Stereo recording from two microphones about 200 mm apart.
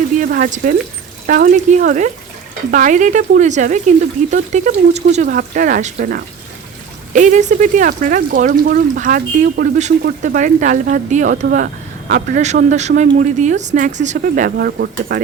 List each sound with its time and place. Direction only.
0.2 s speech: 45° right (ahead or behind)